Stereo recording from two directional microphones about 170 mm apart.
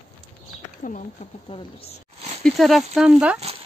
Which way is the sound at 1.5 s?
35° left (ahead or behind).